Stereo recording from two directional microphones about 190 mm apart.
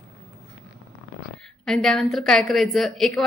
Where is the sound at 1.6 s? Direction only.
5° left (ahead or behind).